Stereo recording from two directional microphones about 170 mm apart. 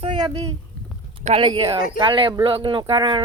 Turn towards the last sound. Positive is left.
turn(degrees=-30)  # may be behind; listen again after turning